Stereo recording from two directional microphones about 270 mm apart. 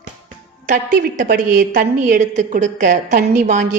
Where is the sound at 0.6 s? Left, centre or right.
Right.